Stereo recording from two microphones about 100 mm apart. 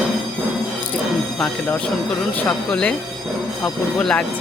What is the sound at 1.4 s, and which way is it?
Speech, 15° left (ahead or behind).